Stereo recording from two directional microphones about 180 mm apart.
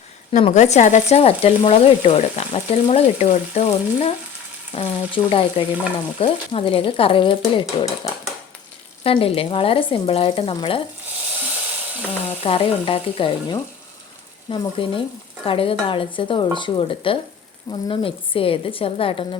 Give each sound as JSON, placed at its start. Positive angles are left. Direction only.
{"t": 0.3, "sound": "speech", "side_deg": 35}
{"t": 9.0, "sound": "speech", "side_deg": 30}
{"t": 12.4, "sound": "speech", "side_deg": 30}
{"t": 14.5, "sound": "dishes", "side_deg": 25}
{"t": 17.7, "sound": "speech", "side_deg": 25}